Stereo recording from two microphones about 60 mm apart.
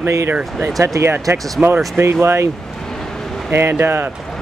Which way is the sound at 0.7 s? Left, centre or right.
Right.